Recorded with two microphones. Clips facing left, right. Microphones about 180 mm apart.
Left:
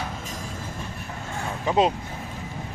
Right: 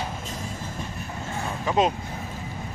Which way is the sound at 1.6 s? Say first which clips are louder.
Left 1 dB; 25° left (ahead or behind).